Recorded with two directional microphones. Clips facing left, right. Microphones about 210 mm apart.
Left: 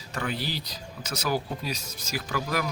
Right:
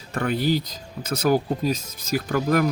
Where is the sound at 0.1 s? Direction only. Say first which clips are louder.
Right 9 dB; 50° right (ahead or behind).